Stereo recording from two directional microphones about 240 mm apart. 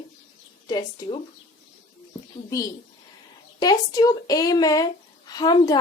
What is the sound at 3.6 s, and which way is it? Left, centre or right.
A woman's voice, centre.